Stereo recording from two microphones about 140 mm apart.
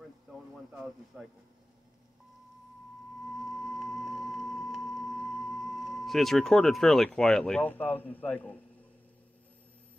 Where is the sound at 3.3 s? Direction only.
Centre (ahead or behind).